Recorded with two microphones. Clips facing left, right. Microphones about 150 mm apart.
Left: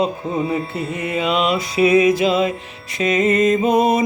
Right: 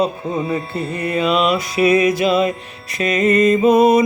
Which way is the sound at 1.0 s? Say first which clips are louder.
Right 2 dB; 20° left (ahead or behind).